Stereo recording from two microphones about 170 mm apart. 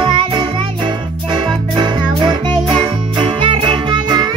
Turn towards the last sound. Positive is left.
turn(degrees=-25)  # may be behind; listen again after turning